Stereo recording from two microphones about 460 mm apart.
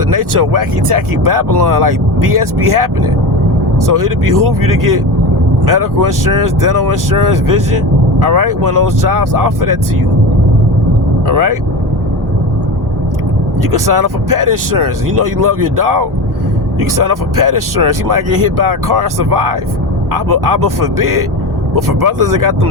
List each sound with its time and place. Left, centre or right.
0.1 s speech: right
11.3 s speech: right
13.6 s speech: right